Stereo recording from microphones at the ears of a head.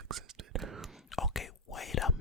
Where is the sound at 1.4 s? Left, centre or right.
Left.